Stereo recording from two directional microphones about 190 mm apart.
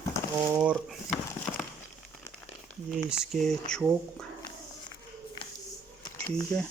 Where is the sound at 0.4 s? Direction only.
10° right (ahead or behind).